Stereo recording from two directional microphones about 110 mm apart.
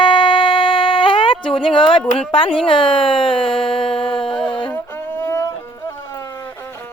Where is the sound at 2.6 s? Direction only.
50° left (ahead or behind).